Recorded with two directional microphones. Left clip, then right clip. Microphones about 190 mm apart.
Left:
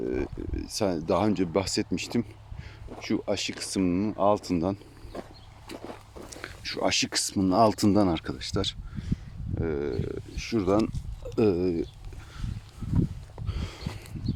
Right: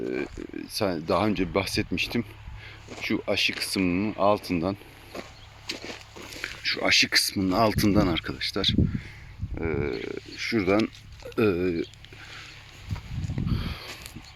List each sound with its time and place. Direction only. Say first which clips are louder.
0.0 s speech: even; 5° left (ahead or behind)
5.6 s a sound: right 5 dB; centre (ahead or behind)
6.4 s speech: right 2 dB; 15° left (ahead or behind)
9.6 s speech: right 1 dB; centre (ahead or behind)
11.3 s speech: even; 10° left (ahead or behind)
13.5 s sniff: right 3 dB; 15° left (ahead or behind)